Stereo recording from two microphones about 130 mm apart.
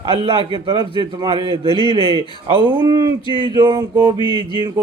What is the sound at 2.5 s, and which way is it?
A man's voice, 40° right (ahead or behind).